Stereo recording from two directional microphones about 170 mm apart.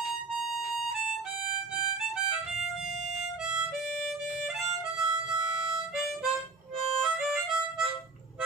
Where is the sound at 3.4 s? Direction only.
5° right (ahead or behind).